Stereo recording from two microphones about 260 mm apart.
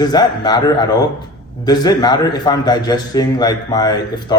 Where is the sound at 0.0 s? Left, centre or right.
Centre.